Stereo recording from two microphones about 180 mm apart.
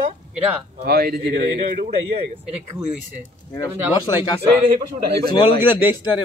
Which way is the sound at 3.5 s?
25° left (ahead or behind).